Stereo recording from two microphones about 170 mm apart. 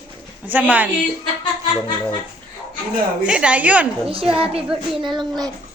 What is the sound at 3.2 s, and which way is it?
Speech, 5° right (ahead or behind).